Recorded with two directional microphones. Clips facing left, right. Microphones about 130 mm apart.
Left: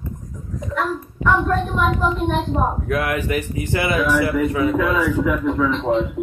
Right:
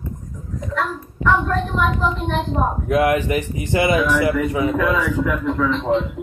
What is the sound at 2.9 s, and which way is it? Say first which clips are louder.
Speech: right 4 dB; 20° right (ahead or behind).